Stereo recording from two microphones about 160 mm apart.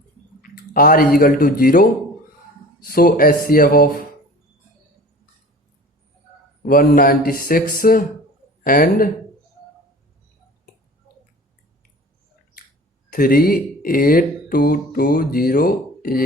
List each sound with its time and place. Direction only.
0.4 s speech: 65° left (ahead or behind)
6.6 s speech: 60° left (ahead or behind)
13.1 s speech: 65° left (ahead or behind)